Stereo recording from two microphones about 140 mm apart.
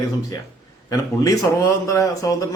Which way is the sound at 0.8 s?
25° left (ahead or behind).